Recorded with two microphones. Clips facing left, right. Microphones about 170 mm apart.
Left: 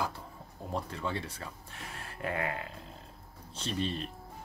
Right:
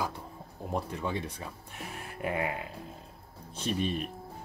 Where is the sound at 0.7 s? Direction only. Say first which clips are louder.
Right 2 dB; 15° right (ahead or behind).